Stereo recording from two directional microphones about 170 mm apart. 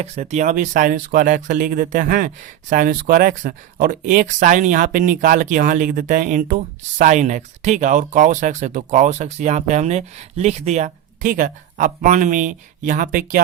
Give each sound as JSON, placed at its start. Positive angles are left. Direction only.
{"t": 0.0, "sound": "speech", "side_deg": -40}